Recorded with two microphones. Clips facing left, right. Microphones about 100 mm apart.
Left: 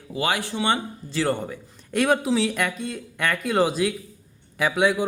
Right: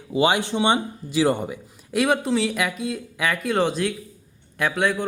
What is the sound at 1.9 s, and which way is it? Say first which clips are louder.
Speech: even; centre (ahead or behind).